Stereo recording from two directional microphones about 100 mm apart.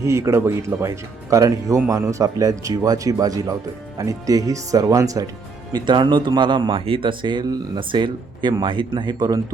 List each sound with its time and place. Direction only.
0.0 s speech: 30° right (ahead or behind)
5.7 s speech: 50° right (ahead or behind)